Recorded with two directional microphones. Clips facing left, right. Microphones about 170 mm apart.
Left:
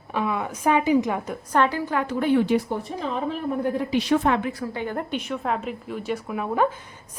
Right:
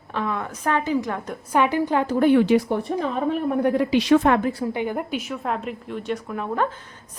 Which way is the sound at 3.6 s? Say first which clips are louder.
Right 5 dB; 90° right.